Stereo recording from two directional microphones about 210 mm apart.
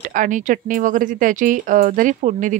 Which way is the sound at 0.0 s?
40° right (ahead or behind).